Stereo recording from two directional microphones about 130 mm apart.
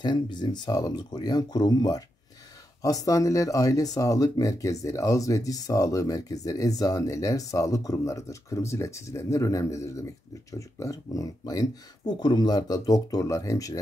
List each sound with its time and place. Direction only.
0.0 s speech: 35° left (ahead or behind)